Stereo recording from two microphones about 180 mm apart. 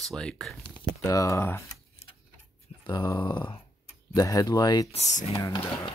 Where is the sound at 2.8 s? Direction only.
20° left (ahead or behind).